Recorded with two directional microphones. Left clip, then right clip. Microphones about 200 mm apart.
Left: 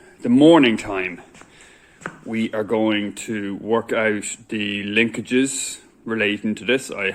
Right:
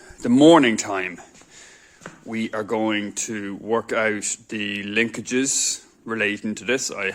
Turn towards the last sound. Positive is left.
turn(degrees=-10)  # may be behind; listen again after turning